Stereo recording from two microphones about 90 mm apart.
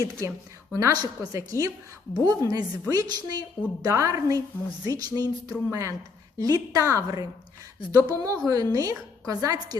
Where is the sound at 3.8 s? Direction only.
35° right (ahead or behind).